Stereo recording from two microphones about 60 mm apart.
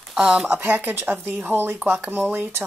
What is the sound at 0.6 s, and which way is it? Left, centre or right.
Speech, right.